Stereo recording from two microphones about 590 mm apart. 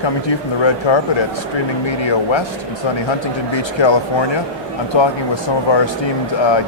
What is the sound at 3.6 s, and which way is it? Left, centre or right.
Speech, left.